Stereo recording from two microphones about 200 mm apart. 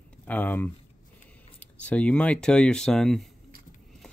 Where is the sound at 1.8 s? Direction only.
5° left (ahead or behind).